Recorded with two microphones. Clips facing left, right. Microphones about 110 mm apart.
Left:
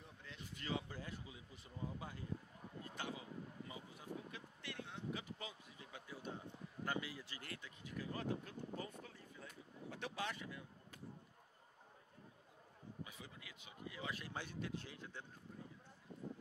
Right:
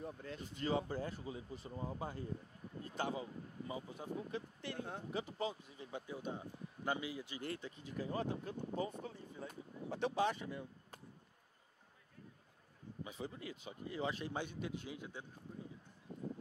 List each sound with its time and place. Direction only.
0.0 s speech: 45° right (ahead or behind); by 7.5 s 20° right (ahead or behind)
7.5 s speech: 35° right (ahead or behind)
13.0 s speech: 30° right (ahead or behind); by 15.2 s 15° right (ahead or behind)